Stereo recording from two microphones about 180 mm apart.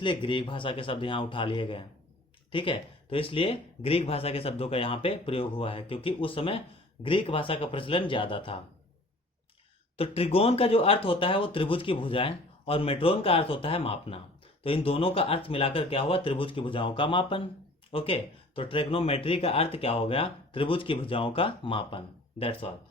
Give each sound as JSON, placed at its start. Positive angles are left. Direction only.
{"t": 0.0, "sound": "speech", "side_deg": 25}
{"t": 10.0, "sound": "speech", "side_deg": 35}